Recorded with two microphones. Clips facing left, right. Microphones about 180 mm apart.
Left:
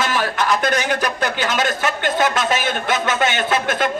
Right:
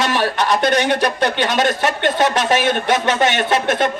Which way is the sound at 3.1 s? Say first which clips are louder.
Right 3 dB; 25° right (ahead or behind).